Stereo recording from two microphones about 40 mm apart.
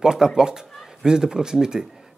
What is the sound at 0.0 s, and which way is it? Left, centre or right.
Speech, centre.